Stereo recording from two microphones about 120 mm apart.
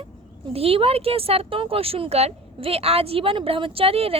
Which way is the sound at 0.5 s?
55° right (ahead or behind).